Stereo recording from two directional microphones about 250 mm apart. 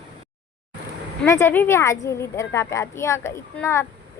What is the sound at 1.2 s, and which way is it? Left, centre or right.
A woman's voice, centre.